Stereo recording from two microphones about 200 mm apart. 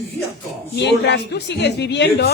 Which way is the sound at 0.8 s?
60° left (ahead or behind).